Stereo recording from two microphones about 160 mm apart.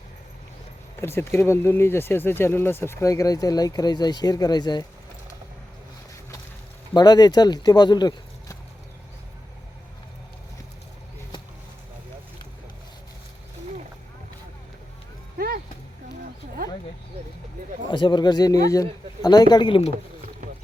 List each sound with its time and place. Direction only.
1.0 s speech: 15° left (ahead or behind)
6.9 s speech: 25° left (ahead or behind)
15.4 s music: 65° right (ahead or behind)
17.8 s speech: 30° left (ahead or behind)